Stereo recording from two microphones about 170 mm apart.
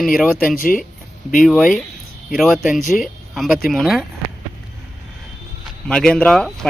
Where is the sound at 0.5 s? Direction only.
55° left (ahead or behind).